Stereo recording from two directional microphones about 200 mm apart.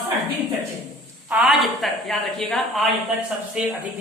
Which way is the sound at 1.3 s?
5° right (ahead or behind).